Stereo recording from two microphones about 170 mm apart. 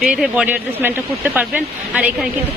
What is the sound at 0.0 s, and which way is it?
Speech, 5° right (ahead or behind).